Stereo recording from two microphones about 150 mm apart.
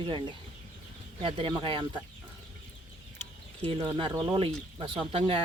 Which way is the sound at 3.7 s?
35° right (ahead or behind).